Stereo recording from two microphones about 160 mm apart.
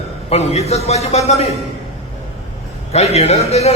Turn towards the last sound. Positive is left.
turn(degrees=40)  # may be behind; listen again after turning